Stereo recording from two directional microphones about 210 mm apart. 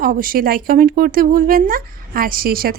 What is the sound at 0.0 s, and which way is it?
Speech, 45° right (ahead or behind).